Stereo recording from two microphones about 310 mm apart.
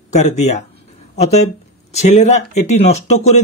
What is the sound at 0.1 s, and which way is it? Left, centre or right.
Speech, left.